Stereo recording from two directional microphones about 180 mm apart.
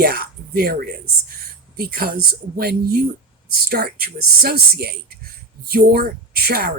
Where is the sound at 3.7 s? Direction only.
60° right (ahead or behind).